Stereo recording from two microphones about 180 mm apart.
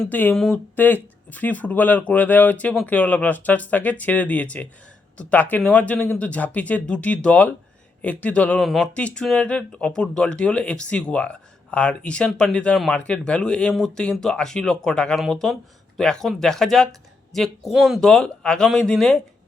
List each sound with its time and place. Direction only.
0.0 s speech: 10° left (ahead or behind)